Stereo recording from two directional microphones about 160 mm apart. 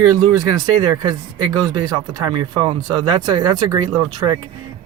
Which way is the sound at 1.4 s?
25° right (ahead or behind).